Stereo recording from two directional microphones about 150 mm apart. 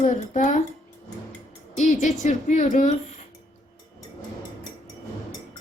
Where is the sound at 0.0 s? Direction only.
60° left (ahead or behind).